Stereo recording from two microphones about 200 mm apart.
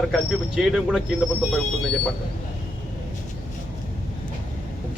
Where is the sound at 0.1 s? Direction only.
Centre (ahead or behind).